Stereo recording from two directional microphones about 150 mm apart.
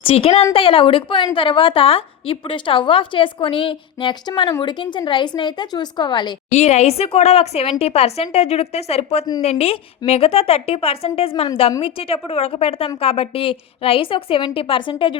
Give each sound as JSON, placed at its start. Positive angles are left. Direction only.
{"t": 0.0, "sound": "a woman's voice", "side_deg": 40}
{"t": 6.5, "sound": "a woman's voice", "side_deg": 45}